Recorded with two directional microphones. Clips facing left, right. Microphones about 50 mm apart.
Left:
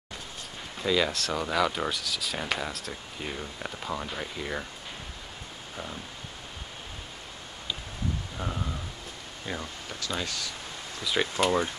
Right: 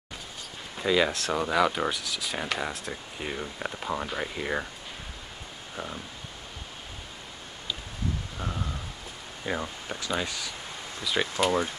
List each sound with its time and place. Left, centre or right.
0.7 s speech: centre
2.7 s speech: right
3.2 s speech: centre
8.4 s speech: centre
9.5 s speech: right
11.1 s speech: centre